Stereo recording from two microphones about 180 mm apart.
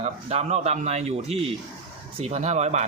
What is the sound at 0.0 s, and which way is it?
A man's voice, 35° right (ahead or behind).